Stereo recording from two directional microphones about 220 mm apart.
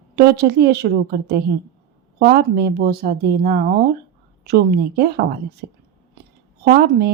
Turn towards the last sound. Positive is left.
turn(degrees=-45)  # may be behind; listen again after turning